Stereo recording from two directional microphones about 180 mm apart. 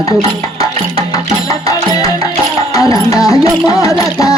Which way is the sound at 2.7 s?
20° left (ahead or behind).